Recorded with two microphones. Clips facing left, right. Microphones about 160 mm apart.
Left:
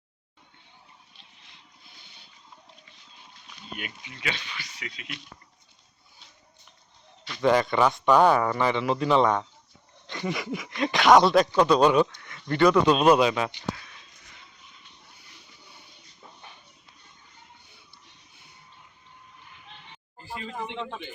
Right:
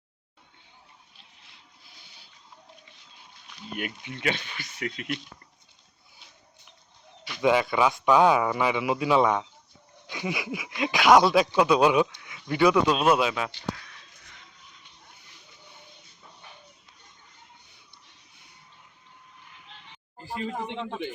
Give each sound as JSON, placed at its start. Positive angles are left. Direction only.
{"t": 3.8, "sound": "speech", "side_deg": -55}
{"t": 7.3, "sound": "speech", "side_deg": -5}